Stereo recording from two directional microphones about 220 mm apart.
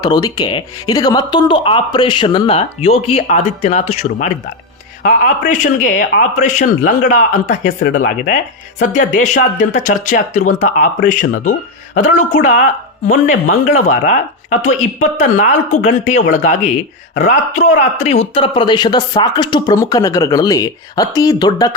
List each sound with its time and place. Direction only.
0.0 s a man's voice: 20° left (ahead or behind)